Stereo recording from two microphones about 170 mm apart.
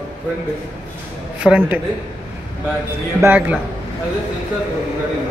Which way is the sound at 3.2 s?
10° right (ahead or behind).